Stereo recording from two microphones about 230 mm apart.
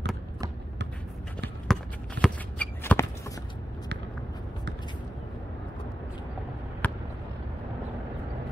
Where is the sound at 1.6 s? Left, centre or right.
Centre.